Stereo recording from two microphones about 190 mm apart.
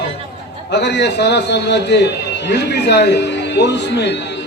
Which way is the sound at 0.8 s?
65° left (ahead or behind).